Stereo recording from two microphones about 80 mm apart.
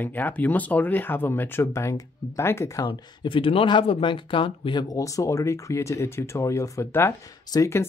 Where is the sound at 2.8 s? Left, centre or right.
Left.